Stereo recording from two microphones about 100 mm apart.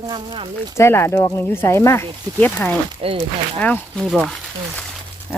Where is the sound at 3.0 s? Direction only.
65° right (ahead or behind).